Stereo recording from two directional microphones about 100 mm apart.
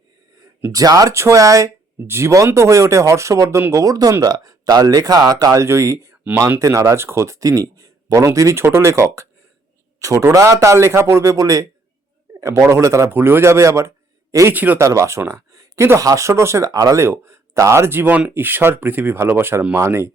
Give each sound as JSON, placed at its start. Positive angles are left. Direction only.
{"t": 0.7, "sound": "speech", "side_deg": -35}
{"t": 14.5, "sound": "speech", "side_deg": -15}
{"t": 14.8, "sound": "speech", "side_deg": -30}